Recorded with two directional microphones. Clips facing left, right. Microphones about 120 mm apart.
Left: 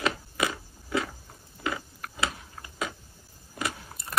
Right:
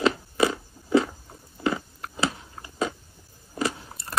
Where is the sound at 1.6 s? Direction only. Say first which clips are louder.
Right 6 dB; 30° right (ahead or behind).